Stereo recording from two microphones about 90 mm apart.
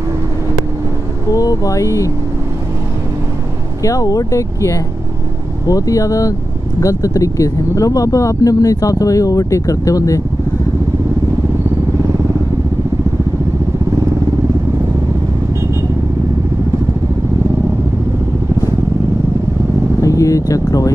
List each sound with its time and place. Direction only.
1.3 s speech: 40° left (ahead or behind)
3.8 s speech: 40° left (ahead or behind)
20.0 s a sound: 40° left (ahead or behind)